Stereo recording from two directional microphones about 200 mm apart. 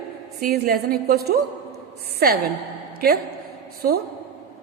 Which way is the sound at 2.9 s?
50° right (ahead or behind).